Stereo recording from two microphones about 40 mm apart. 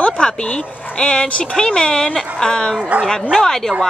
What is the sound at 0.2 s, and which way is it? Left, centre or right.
A woman's voice, left.